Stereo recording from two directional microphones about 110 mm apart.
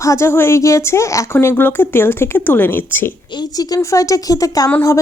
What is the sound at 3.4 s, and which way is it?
A woman's voice, 35° left (ahead or behind).